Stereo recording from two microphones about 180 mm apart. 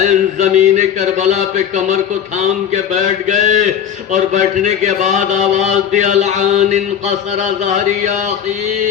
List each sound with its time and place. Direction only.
0.0 s mantra: 40° right (ahead or behind)